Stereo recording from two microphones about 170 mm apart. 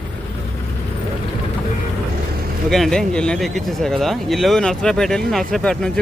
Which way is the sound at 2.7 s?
5° left (ahead or behind).